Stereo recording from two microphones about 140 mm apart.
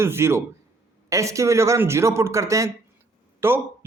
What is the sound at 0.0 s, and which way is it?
A man's voice, 20° right (ahead or behind).